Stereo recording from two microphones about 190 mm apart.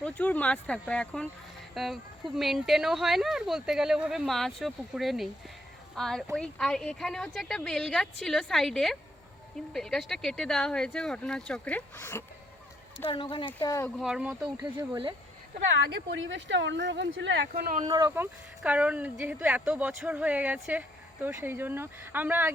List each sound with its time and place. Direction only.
0.0 s speech: 5° left (ahead or behind)
13.1 s speech: 25° left (ahead or behind)
14.0 s speech: 5° right (ahead or behind)
16.0 s speech: 80° right; by 17.8 s 50° right (ahead or behind)
17.8 s speech: 25° right (ahead or behind)
18.1 s speech: 10° right (ahead or behind)